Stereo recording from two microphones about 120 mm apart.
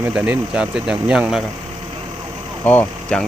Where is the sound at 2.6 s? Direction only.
15° left (ahead or behind).